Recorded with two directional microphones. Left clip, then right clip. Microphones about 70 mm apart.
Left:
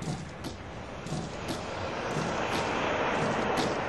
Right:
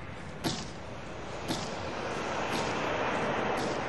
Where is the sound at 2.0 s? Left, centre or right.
Left.